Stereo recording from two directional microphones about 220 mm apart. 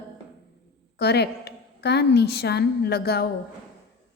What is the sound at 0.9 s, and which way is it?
A woman's voice, 50° left (ahead or behind).